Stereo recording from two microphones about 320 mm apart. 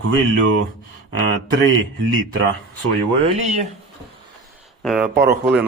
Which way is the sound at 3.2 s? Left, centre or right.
Right.